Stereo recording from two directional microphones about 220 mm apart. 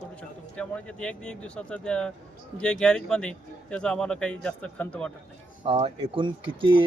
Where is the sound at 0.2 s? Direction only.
5° left (ahead or behind).